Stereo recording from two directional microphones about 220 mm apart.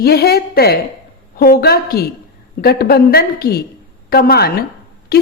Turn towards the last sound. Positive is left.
turn(degrees=45)  # may be behind; listen again after turning